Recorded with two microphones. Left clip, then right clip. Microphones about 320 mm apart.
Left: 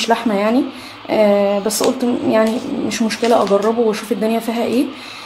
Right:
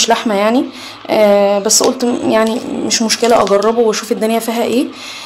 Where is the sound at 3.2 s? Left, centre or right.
Right.